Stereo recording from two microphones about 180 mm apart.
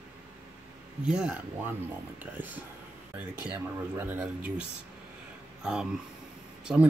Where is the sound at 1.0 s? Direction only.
5° right (ahead or behind).